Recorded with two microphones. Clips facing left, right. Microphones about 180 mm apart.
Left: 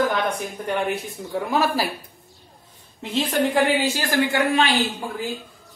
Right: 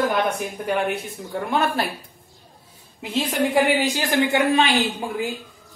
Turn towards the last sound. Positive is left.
turn(degrees=-15)  # may be behind; listen again after turning